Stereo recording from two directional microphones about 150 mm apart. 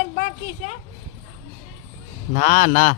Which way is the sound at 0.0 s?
60° left (ahead or behind).